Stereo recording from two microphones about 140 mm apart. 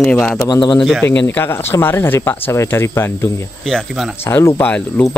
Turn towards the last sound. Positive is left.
turn(degrees=10)  # may be behind; listen again after turning